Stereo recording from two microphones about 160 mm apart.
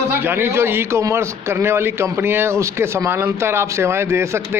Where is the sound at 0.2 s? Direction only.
15° right (ahead or behind).